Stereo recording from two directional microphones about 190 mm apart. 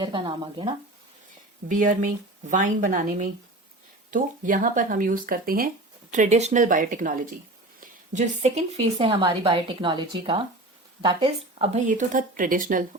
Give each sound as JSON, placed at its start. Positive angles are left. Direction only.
{"t": 0.0, "sound": "a woman's voice", "side_deg": -25}
{"t": 1.6, "sound": "a woman's voice", "side_deg": -45}